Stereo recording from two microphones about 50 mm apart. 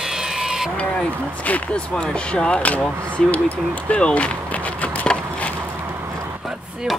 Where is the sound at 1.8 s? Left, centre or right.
Centre.